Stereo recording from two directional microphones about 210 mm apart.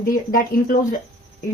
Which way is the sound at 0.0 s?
40° left (ahead or behind).